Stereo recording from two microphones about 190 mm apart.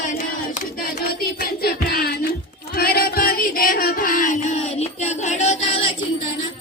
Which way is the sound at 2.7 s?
50° left (ahead or behind).